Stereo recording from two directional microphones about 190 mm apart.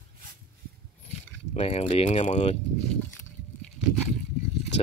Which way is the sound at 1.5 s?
35° left (ahead or behind).